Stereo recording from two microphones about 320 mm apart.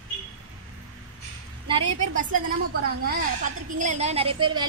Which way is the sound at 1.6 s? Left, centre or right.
Centre.